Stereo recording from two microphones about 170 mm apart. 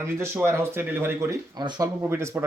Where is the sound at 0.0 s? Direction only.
15° right (ahead or behind).